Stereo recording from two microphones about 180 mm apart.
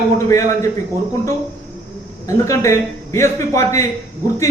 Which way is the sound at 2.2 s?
15° left (ahead or behind).